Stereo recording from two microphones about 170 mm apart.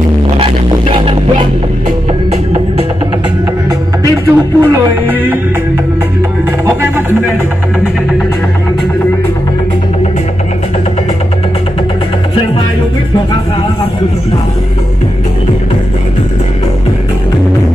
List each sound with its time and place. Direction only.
0.4 s music: 30° right (ahead or behind)
4.0 s speech: 20° right (ahead or behind)